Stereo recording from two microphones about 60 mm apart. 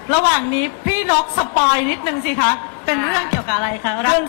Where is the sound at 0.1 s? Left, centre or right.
Centre.